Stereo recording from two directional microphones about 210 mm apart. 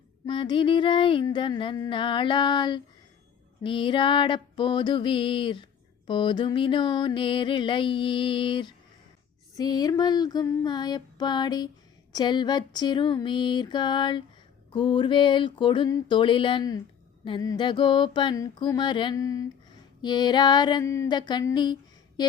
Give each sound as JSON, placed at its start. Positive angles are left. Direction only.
{"t": 0.3, "sound": "music", "side_deg": 25}